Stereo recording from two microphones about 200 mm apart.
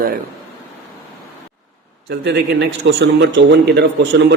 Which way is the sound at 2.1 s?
55° right (ahead or behind).